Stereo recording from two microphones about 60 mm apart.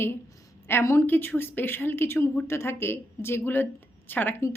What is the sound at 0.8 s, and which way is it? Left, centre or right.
Speech, left.